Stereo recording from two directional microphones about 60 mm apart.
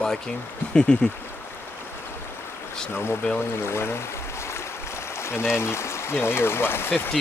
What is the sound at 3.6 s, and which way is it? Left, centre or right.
Stream, left.